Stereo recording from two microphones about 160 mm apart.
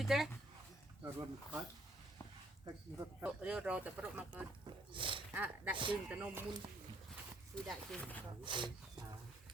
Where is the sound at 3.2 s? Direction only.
5° right (ahead or behind).